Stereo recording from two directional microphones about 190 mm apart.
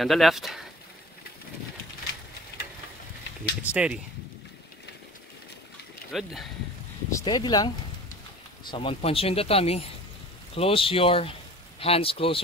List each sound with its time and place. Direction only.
0.0 s speech: centre (ahead or behind)
3.6 s speech: 5° right (ahead or behind)
6.1 s speech: centre (ahead or behind)
7.1 s speech: 20° left (ahead or behind)